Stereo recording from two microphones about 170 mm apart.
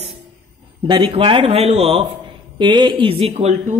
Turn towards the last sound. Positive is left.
turn(degrees=-35)  # may be behind; listen again after turning